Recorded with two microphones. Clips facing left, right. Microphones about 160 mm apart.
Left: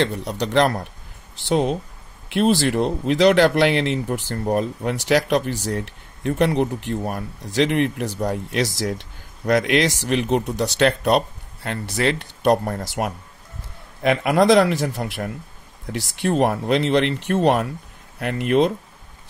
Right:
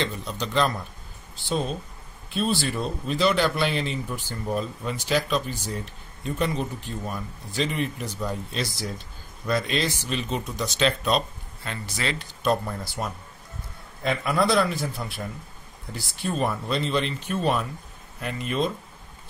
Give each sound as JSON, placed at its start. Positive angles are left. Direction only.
{"t": 0.0, "sound": "speech", "side_deg": 70}